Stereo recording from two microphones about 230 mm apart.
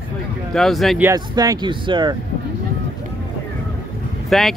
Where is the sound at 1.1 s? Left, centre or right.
Centre.